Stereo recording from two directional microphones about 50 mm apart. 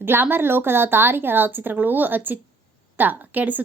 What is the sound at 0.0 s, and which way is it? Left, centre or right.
A woman's voice, right.